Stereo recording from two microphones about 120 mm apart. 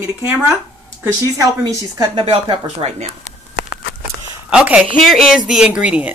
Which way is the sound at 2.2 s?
45° right (ahead or behind).